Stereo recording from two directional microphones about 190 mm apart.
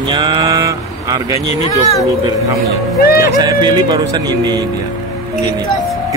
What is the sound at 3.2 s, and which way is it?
Speech, 20° right (ahead or behind).